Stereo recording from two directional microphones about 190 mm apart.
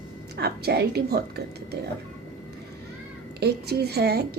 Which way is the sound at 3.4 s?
60° right (ahead or behind).